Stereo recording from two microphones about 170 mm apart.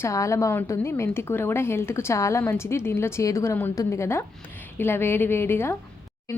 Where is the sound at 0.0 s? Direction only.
20° left (ahead or behind).